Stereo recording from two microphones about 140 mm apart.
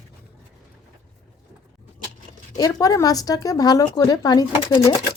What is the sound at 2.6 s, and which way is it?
Speech, 25° left (ahead or behind).